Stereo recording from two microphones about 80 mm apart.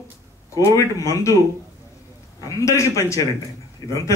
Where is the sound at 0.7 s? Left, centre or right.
Left.